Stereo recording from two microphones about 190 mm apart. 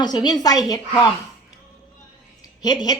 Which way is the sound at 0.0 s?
20° left (ahead or behind).